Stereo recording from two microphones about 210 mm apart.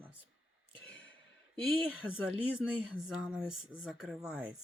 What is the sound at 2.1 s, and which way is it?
Speech, 5° right (ahead or behind).